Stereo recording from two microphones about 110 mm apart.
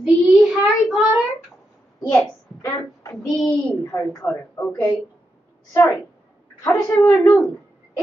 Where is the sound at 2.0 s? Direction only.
25° left (ahead or behind).